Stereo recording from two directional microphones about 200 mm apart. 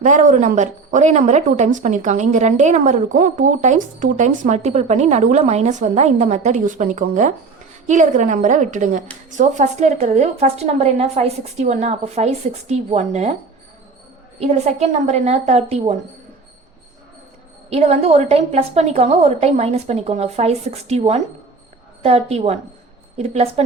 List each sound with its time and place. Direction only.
0.0 s a woman's voice: 40° right (ahead or behind)
14.3 s a woman's voice: 35° right (ahead or behind)
17.7 s a woman's voice: 30° right (ahead or behind)